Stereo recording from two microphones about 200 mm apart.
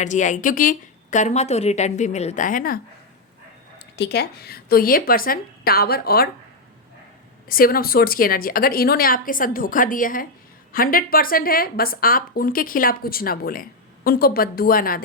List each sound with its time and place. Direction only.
0.0 s a woman's voice: 40° left (ahead or behind)
3.9 s a woman's voice: 55° left (ahead or behind)
7.4 s a woman's voice: 45° left (ahead or behind)